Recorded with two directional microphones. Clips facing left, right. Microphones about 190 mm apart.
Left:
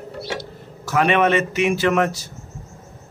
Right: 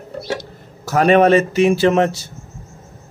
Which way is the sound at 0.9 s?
40° right (ahead or behind).